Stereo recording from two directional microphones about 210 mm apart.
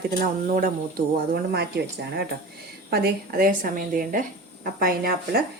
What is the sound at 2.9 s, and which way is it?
Speech, 45° right (ahead or behind).